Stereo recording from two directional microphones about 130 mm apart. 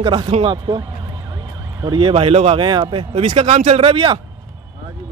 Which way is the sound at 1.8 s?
40° right (ahead or behind).